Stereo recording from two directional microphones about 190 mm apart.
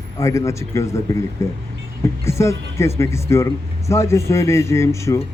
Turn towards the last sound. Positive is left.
turn(degrees=15)  # may be behind; listen again after turning